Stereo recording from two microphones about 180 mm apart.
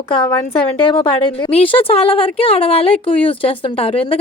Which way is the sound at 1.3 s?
30° left (ahead or behind).